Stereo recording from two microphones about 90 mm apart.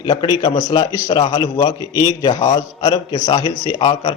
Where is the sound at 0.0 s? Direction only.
55° left (ahead or behind).